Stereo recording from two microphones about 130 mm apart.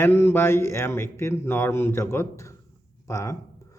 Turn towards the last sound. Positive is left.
turn(degrees=25)  # may be behind; listen again after turning